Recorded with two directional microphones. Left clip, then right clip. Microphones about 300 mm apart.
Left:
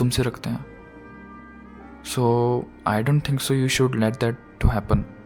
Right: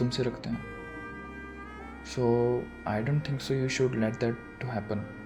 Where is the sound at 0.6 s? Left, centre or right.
Centre.